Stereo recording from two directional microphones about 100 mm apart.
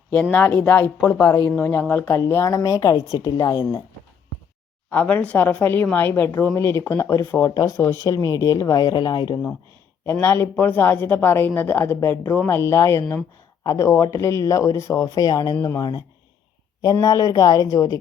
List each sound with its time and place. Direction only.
0.1 s speech: 15° left (ahead or behind)
2.1 s speech: 30° left (ahead or behind)
4.9 s speech: 15° left (ahead or behind); by 9.4 s 45° left (ahead or behind)
10.1 s speech: 25° left (ahead or behind)